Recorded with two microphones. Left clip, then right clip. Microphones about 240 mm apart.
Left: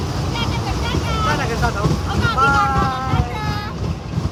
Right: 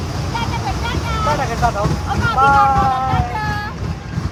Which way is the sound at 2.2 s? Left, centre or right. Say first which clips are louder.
Right 4 dB; centre.